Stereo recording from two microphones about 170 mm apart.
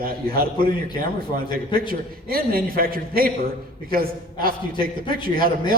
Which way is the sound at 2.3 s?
60° right (ahead or behind).